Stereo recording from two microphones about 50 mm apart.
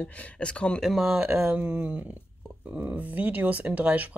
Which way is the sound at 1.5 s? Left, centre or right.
Right.